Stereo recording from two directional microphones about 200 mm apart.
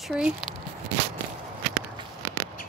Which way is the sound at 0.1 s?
5° right (ahead or behind).